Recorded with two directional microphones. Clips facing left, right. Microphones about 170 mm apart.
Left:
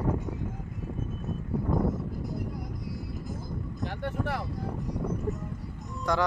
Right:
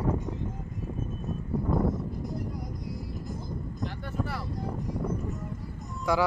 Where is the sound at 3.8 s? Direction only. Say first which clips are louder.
Left 2 dB; 55° left (ahead or behind).